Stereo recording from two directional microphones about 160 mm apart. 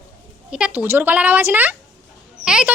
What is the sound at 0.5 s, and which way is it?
Speech, 10° right (ahead or behind).